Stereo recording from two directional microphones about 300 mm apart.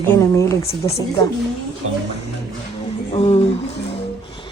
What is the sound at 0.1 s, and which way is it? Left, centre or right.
Speech, centre.